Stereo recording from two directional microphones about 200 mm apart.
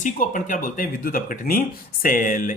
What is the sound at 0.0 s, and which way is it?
Speech, 40° left (ahead or behind).